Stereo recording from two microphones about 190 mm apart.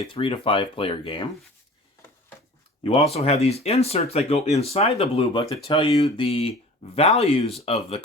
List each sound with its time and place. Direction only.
0.0 s speech: 30° left (ahead or behind)
3.1 s speech: 35° left (ahead or behind)